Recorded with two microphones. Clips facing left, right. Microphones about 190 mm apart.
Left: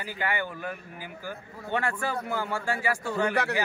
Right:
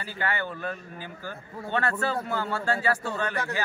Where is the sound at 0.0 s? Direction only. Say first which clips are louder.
Even; 15° left (ahead or behind).